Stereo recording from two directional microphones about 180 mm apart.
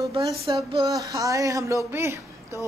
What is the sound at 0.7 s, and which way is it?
A woman's voice, 25° right (ahead or behind).